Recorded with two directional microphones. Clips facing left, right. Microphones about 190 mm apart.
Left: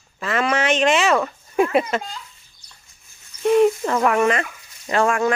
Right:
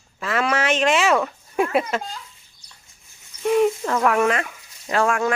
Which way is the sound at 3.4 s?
Centre (ahead or behind).